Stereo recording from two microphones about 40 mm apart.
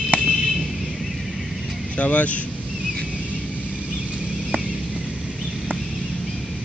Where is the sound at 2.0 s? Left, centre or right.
Left.